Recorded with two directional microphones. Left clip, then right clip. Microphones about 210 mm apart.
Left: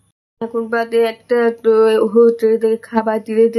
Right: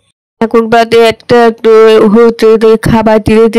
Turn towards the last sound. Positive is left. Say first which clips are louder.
# right 9 dB
turn(degrees=-40)  # may be behind; listen again after turning